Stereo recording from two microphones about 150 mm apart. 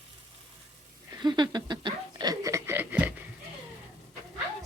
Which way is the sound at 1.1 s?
30° right (ahead or behind).